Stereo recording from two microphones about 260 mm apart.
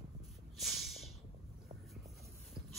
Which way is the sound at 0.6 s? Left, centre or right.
Centre.